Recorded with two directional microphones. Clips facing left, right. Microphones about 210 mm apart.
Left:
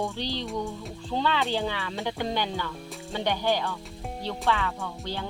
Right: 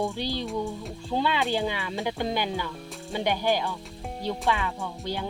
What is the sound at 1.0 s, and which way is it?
Speech, 10° right (ahead or behind).